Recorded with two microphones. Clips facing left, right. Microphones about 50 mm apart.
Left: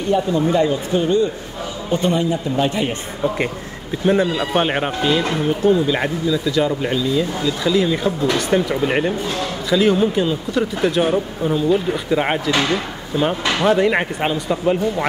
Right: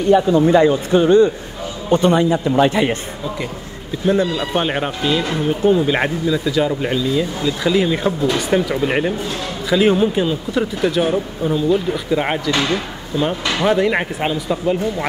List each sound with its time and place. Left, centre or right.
0.1 s a man's voice: right
4.0 s speech: left
4.5 s speech: centre
5.6 s speech: right
7.6 s speech: right
8.5 s speech: centre
9.7 s speech: centre
10.9 s speech: centre
13.7 s speech: centre